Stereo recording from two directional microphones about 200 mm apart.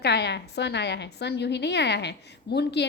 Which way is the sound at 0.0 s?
55° left (ahead or behind).